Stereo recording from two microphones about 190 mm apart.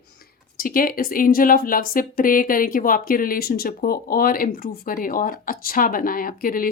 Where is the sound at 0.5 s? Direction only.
50° left (ahead or behind).